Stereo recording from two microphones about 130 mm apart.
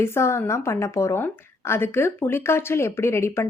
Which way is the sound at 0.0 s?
20° left (ahead or behind).